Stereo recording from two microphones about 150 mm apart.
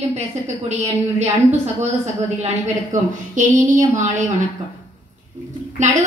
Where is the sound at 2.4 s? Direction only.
50° right (ahead or behind).